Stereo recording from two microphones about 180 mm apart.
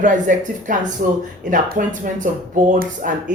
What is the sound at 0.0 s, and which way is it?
Speech, 45° right (ahead or behind).